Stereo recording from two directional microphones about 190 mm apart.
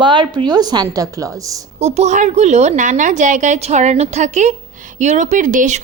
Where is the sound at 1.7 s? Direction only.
35° right (ahead or behind).